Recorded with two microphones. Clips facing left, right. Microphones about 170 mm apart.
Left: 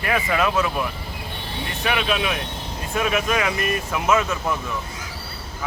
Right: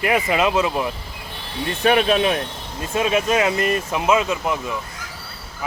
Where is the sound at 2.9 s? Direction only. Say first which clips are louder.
Right 3 dB; 25° right (ahead or behind).